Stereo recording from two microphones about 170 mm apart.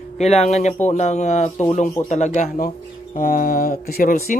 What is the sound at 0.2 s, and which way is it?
Speech, 40° left (ahead or behind).